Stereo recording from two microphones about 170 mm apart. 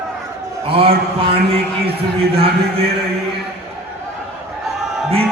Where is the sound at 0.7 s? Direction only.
35° right (ahead or behind).